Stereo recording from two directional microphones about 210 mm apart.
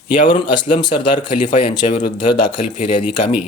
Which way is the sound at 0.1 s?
25° left (ahead or behind).